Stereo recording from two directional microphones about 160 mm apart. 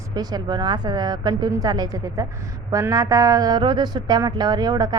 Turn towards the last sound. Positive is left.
turn(degrees=-25)  # may be behind; listen again after turning